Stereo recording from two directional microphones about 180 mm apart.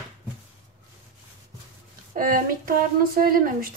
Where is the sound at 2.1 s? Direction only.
50° right (ahead or behind).